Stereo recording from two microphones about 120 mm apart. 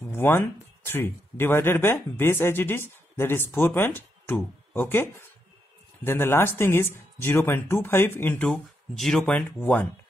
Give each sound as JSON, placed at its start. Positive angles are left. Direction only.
{"t": 0.0, "sound": "speech", "side_deg": 20}
{"t": 8.5, "sound": "speech", "side_deg": 5}